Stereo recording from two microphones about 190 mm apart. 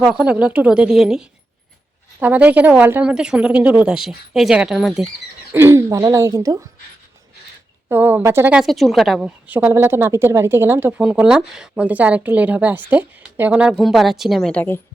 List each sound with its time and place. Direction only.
0.0 s speech: 5° right (ahead or behind)
2.2 s speech: 10° right (ahead or behind)
5.5 s a woman's voice: 15° right (ahead or behind)
7.9 s a woman's voice: 10° right (ahead or behind); by 14.8 s 10° left (ahead or behind)